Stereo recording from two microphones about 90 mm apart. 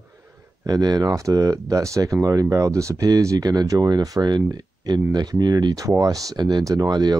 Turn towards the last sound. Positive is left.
turn(degrees=-45)  # may be behind; listen again after turning